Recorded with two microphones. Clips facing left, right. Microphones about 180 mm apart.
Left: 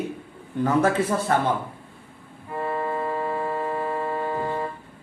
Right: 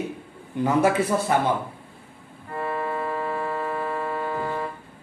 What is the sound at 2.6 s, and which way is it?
Music, 30° left (ahead or behind).